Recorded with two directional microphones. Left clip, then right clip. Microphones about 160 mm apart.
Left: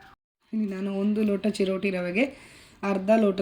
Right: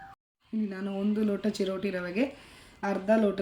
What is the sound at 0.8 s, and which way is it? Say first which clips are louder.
Speech: left 4 dB; centre (ahead or behind).